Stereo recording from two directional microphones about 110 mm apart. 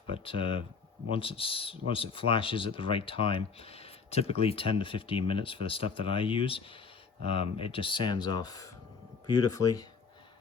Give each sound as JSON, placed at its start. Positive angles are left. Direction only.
{"t": 0.1, "sound": "speech", "side_deg": 55}